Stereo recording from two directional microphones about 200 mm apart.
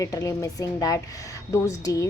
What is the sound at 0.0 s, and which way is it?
A woman's voice, 15° left (ahead or behind).